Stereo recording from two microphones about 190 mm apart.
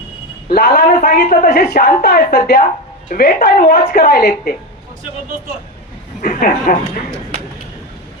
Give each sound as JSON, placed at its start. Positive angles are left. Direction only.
{"t": 0.4, "sound": "a woman's voice", "side_deg": 55}
{"t": 6.2, "sound": "a woman's voice", "side_deg": 45}